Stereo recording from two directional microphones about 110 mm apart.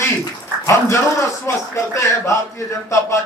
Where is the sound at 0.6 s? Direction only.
25° left (ahead or behind).